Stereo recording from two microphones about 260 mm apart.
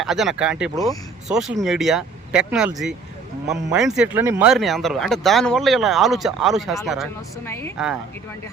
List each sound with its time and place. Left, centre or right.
0.0 s speech: centre